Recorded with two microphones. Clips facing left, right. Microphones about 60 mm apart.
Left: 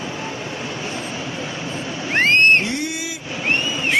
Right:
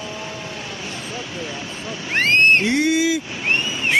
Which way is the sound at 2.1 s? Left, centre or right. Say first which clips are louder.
Left 1 dB; centre.